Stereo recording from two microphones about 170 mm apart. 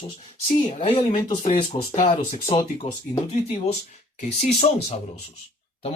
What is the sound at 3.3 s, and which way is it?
Speech, 40° left (ahead or behind).